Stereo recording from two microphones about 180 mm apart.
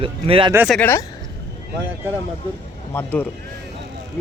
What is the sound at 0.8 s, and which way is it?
Speech, 10° left (ahead or behind).